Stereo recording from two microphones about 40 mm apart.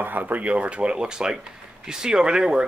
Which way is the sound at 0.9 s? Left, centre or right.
Centre.